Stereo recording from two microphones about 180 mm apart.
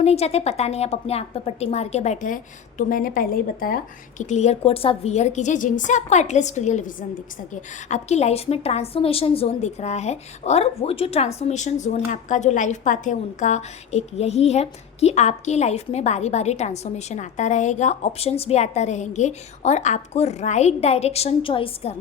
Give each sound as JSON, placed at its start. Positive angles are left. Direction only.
{"t": 0.0, "sound": "a woman's voice", "side_deg": 35}
{"t": 4.2, "sound": "a woman's voice", "side_deg": 40}